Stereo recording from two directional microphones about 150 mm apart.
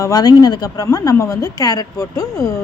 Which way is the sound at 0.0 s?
25° left (ahead or behind).